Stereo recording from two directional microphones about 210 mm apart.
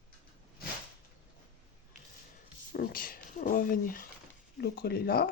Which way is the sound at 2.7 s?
45° left (ahead or behind).